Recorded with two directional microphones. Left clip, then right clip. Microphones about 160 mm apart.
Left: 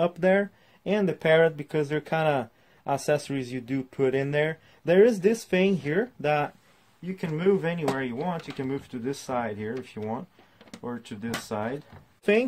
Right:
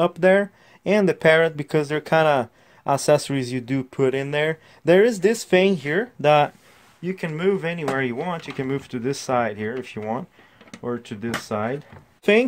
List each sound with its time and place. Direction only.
0.0 s speech: 30° right (ahead or behind); by 11.7 s 50° right (ahead or behind)